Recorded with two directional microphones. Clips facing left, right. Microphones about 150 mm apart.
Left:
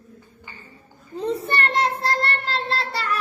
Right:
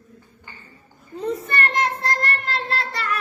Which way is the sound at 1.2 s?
30° left (ahead or behind).